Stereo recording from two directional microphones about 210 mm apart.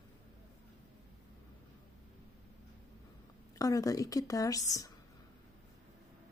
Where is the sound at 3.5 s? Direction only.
15° left (ahead or behind).